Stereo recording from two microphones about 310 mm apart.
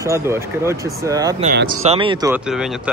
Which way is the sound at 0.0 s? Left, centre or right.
Centre.